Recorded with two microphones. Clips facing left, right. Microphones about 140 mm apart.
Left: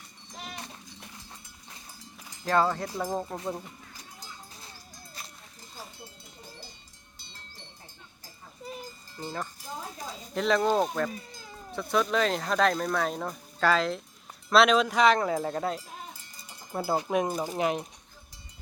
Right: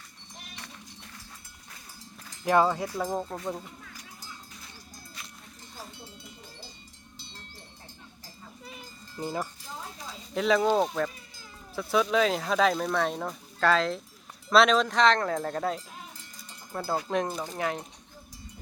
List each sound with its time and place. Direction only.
2.4 s speech: 15° right (ahead or behind)
3.1 s speech: centre (ahead or behind)
9.2 s speech: 15° right (ahead or behind)
10.3 s speech: centre (ahead or behind)
16.4 s speech: 15° left (ahead or behind)